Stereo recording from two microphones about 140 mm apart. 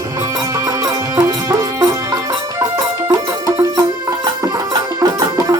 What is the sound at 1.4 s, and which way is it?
Music, 25° right (ahead or behind).